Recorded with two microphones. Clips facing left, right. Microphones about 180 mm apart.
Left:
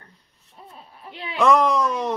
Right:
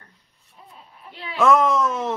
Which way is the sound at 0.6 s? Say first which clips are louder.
Left 3 dB; 35° left (ahead or behind).